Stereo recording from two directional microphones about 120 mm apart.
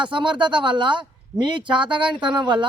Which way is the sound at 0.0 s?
40° right (ahead or behind).